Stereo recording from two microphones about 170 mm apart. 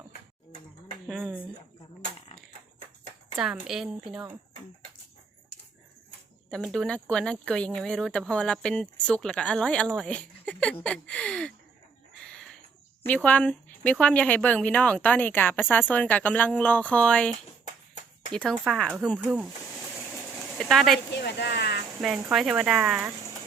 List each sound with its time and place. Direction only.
1.0 s speech: centre (ahead or behind)
3.3 s speech: 5° right (ahead or behind)
6.5 s speech: 5° left (ahead or behind)
12.2 s bird: 5° left (ahead or behind)
13.1 s speech: 10° left (ahead or behind)
18.3 s speech: centre (ahead or behind)
20.6 s speech: centre (ahead or behind)
21.2 s speech: 85° left
22.0 s speech: centre (ahead or behind)